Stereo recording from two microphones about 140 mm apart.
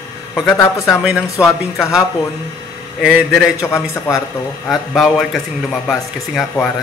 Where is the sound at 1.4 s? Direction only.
20° left (ahead or behind).